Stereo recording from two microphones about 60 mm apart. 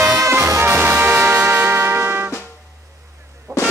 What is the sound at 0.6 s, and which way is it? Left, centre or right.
Music, right.